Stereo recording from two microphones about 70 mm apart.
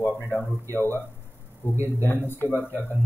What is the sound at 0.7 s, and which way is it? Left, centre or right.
Speech, right.